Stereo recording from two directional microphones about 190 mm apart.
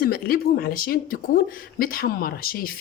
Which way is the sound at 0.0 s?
50° left (ahead or behind).